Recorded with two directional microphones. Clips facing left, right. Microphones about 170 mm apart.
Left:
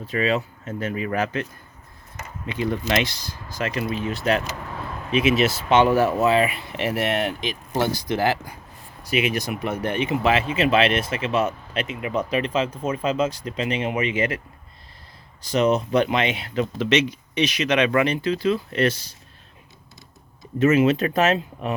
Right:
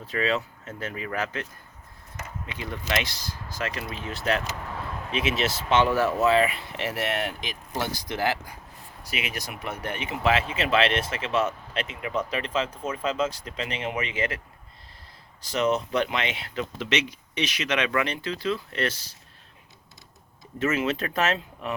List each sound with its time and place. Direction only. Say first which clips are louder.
0.1 s speech: left 4 dB; 15° left (ahead or behind)
2.5 s speech: left 7 dB; 25° left (ahead or behind)
15.4 s speech: left 5 dB; 15° left (ahead or behind)
20.6 s speech: left 8 dB; 15° left (ahead or behind)